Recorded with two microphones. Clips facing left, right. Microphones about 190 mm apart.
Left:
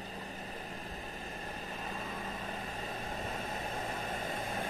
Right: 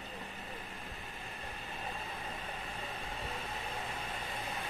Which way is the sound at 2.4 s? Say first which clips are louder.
Left 3 dB; 40° left (ahead or behind).